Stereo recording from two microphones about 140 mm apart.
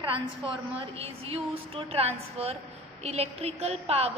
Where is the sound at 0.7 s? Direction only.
45° right (ahead or behind).